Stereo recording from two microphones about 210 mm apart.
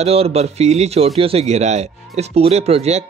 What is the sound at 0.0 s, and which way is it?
A man's voice, 30° right (ahead or behind).